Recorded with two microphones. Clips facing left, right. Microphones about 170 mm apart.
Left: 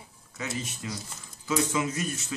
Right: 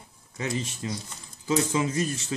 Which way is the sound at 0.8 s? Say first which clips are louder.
Right 3 dB; 30° right (ahead or behind).